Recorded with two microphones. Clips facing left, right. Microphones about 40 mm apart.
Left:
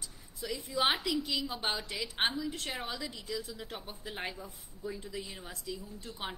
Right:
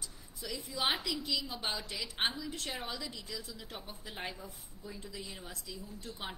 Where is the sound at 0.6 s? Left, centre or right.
Left.